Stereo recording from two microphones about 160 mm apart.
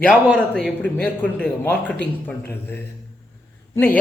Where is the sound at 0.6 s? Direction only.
5° left (ahead or behind).